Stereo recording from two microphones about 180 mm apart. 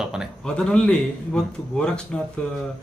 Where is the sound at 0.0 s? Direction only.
5° right (ahead or behind).